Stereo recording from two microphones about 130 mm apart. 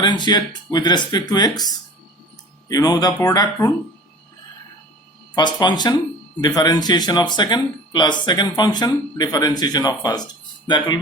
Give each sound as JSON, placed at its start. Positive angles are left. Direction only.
{"t": 0.0, "sound": "speech", "side_deg": 35}
{"t": 2.6, "sound": "speech", "side_deg": 30}
{"t": 5.3, "sound": "speech", "side_deg": 35}